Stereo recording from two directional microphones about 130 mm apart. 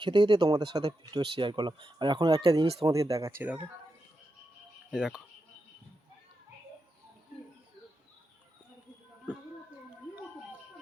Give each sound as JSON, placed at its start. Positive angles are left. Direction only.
{"t": 0.0, "sound": "speech", "side_deg": -40}
{"t": 2.8, "sound": "speech", "side_deg": -25}
{"t": 4.9, "sound": "speech", "side_deg": -5}